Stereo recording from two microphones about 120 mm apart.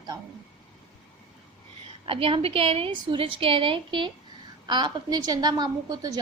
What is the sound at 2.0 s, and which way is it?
A woman's voice, 50° right (ahead or behind).